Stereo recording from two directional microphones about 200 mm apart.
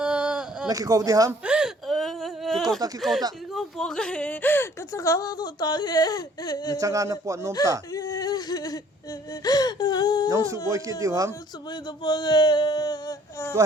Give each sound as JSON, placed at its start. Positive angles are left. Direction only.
{"t": 0.0, "sound": "a sound", "side_deg": -5}
{"t": 0.7, "sound": "speech", "side_deg": -15}
{"t": 1.5, "sound": "whimper", "side_deg": -5}
{"t": 3.0, "sound": "speech", "side_deg": 0}
{"t": 6.7, "sound": "speech", "side_deg": -15}
{"t": 7.9, "sound": "a sound", "side_deg": 15}
{"t": 9.4, "sound": "wail", "side_deg": 20}
{"t": 10.2, "sound": "speech", "side_deg": -15}
{"t": 11.7, "sound": "a sound", "side_deg": 20}